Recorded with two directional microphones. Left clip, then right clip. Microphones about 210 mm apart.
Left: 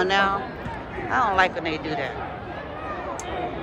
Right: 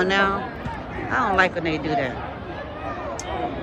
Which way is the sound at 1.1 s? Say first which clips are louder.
Right 1 dB; 10° left (ahead or behind).